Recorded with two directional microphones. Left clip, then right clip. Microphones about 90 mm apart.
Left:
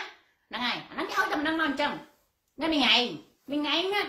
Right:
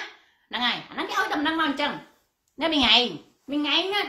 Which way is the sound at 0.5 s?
20° right (ahead or behind).